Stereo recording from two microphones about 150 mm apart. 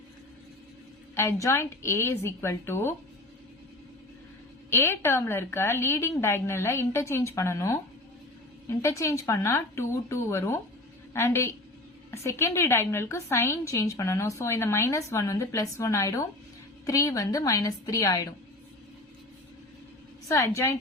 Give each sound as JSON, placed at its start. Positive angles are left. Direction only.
{"t": 1.1, "sound": "a woman's voice", "side_deg": 15}
{"t": 4.7, "sound": "a woman's voice", "side_deg": 15}
{"t": 20.2, "sound": "a woman's voice", "side_deg": 20}